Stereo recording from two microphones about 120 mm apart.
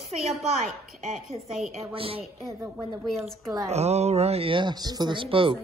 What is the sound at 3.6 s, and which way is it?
Speech, 65° right (ahead or behind).